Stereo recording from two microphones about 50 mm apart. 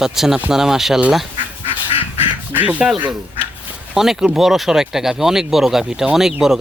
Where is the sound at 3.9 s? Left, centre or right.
Centre.